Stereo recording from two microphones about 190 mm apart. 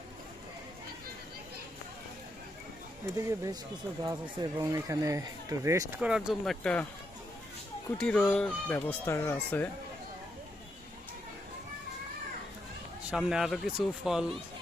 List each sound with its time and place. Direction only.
3.2 s speech: 15° right (ahead or behind)
6.0 s speech: 5° right (ahead or behind)
7.9 s speech: 5° left (ahead or behind)
13.1 s speech: 5° right (ahead or behind)